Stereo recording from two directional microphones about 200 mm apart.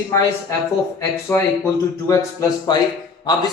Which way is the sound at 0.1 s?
15° left (ahead or behind).